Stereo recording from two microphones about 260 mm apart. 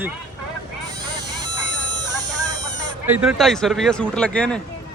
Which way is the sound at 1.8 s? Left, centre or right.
Right.